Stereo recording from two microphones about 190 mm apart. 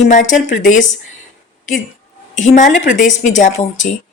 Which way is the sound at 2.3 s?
40° left (ahead or behind).